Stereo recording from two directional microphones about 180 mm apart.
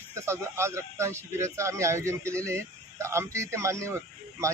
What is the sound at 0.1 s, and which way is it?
Speech, 15° right (ahead or behind).